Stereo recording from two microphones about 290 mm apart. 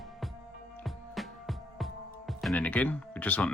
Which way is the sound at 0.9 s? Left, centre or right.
Centre.